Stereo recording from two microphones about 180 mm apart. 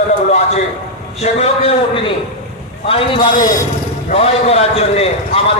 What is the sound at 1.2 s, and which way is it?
Speech, 35° left (ahead or behind).